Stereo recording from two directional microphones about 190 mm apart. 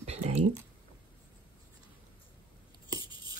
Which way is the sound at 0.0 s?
35° right (ahead or behind).